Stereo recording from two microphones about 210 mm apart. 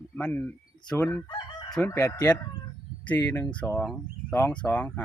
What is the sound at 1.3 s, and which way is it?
Chicken, 20° left (ahead or behind).